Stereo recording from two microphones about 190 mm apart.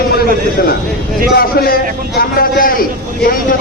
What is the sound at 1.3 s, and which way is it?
A man's voice, 50° left (ahead or behind).